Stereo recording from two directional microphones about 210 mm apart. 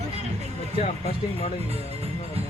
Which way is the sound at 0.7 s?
30° left (ahead or behind).